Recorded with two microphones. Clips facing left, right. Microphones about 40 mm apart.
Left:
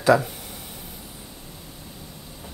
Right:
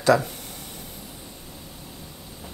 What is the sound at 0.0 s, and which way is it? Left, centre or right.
Speech, centre.